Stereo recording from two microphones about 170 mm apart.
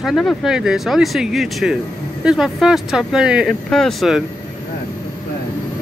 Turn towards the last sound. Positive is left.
turn(degrees=0)  # may be behind; listen again after turning